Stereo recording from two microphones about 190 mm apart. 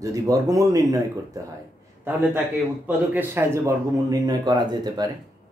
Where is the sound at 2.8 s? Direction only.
10° right (ahead or behind).